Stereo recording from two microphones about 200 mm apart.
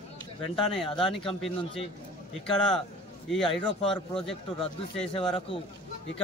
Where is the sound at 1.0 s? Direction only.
25° left (ahead or behind).